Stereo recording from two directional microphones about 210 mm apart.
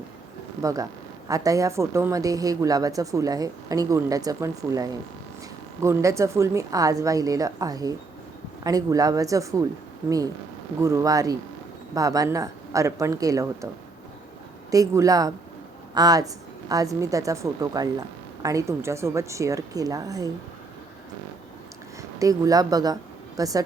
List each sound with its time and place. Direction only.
0.6 s a woman's voice: 15° right (ahead or behind)
10.8 s a woman's voice: 15° right (ahead or behind)
14.7 s a woman's voice: 15° right (ahead or behind)
22.2 s a woman's voice: 15° right (ahead or behind)